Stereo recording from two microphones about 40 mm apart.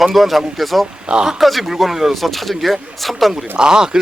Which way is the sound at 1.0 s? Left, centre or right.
Centre.